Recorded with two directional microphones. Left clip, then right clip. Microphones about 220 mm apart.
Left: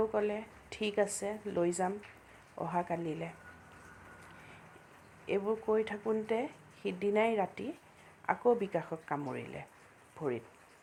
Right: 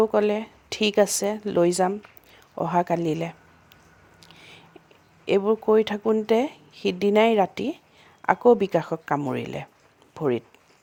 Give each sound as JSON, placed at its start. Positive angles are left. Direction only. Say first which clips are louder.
{"t": 0.0, "sound": "speech", "louder": "right 12 dB", "side_deg": -50}
{"t": 5.2, "sound": "speech", "louder": "right 12 dB", "side_deg": -50}